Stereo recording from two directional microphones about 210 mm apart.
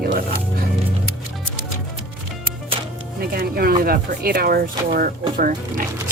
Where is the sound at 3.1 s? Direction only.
45° right (ahead or behind).